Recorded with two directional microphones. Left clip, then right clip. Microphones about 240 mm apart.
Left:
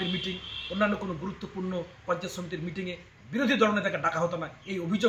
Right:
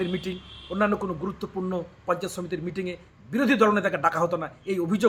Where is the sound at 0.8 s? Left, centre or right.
Right.